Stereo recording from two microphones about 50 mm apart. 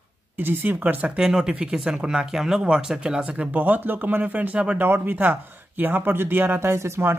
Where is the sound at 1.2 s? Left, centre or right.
Centre.